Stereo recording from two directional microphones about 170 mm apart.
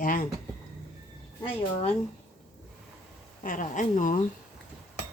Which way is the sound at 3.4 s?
50° left (ahead or behind).